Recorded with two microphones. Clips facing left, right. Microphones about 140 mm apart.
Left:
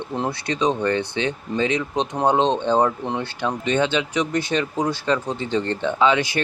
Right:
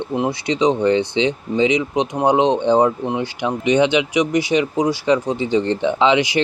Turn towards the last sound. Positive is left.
turn(degrees=-20)  # may be behind; listen again after turning